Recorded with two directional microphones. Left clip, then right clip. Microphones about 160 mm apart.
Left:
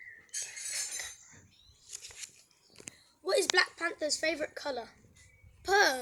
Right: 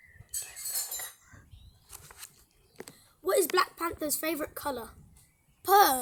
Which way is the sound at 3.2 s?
60° right (ahead or behind).